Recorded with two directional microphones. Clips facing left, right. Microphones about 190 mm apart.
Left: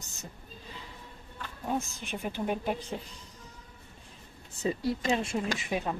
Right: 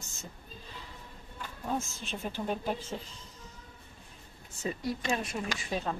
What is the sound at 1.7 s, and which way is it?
A woman's voice, 15° left (ahead or behind).